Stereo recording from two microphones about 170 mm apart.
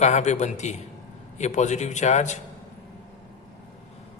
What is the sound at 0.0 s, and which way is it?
A man's voice, 45° left (ahead or behind).